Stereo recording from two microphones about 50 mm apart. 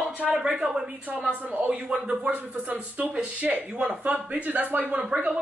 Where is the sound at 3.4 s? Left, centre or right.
Right.